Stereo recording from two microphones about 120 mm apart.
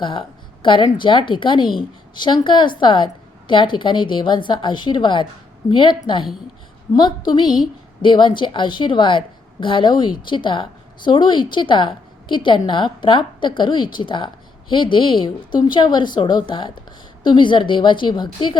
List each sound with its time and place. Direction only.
0.0 s a woman's voice: 45° left (ahead or behind)